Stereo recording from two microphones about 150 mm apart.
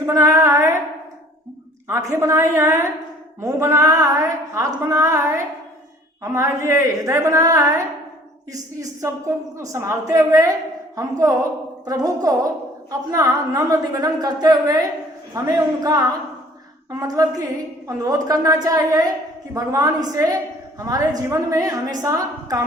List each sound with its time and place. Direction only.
0.0 s a sound: 20° right (ahead or behind)
1.9 s a woman's voice: 20° right (ahead or behind)
6.2 s a woman's voice: 20° right (ahead or behind)
11.9 s a woman's voice: 25° right (ahead or behind)